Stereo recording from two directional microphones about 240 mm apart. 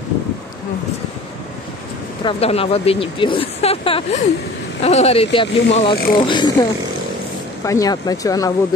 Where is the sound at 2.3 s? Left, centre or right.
Left.